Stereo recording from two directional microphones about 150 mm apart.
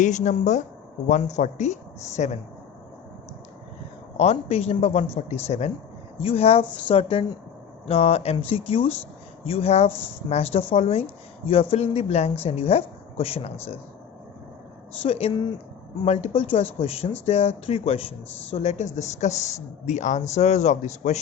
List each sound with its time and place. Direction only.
0.0 s a woman's voice: 55° left (ahead or behind)
4.2 s a woman's voice: 45° left (ahead or behind)
15.0 s a woman's voice: 40° left (ahead or behind)